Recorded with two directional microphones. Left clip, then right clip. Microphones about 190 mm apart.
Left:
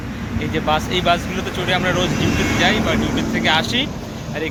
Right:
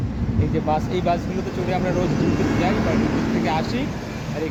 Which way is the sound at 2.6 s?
50° left (ahead or behind).